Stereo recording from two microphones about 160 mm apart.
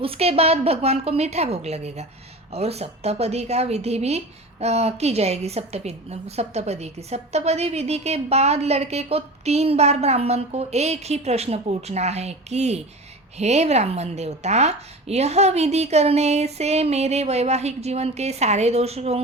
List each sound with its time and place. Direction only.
0.0 s a woman's voice: 35° right (ahead or behind)